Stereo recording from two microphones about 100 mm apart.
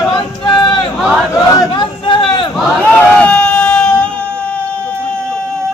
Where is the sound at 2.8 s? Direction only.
15° left (ahead or behind).